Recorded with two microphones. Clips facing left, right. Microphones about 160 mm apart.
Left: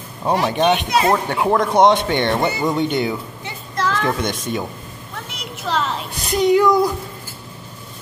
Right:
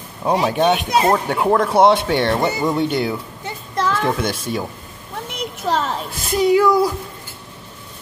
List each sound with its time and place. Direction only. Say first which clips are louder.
0.2 s a child's voice: right 1 dB; 5° right (ahead or behind)
5.3 s a sound: right 3 dB; 50° right (ahead or behind)
6.1 s speech: even; 5° right (ahead or behind)